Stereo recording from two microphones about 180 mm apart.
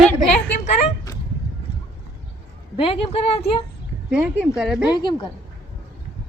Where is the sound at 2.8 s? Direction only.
30° left (ahead or behind).